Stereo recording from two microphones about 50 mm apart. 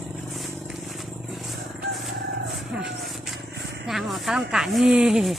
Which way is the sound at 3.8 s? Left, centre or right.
Centre.